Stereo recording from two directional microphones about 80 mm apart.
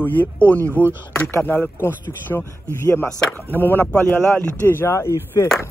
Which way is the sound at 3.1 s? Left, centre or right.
Centre.